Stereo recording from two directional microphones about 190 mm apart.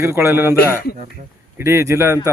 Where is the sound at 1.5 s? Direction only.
15° right (ahead or behind).